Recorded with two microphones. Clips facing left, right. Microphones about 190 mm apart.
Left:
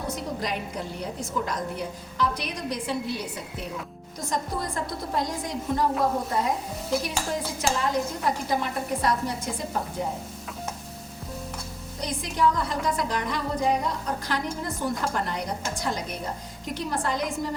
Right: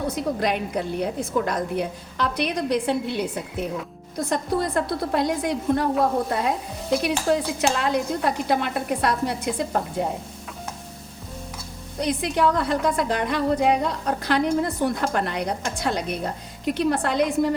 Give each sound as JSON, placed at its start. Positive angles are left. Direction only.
{"t": 0.4, "sound": "a woman's voice", "side_deg": -65}
{"t": 11.9, "sound": "a woman's voice", "side_deg": -65}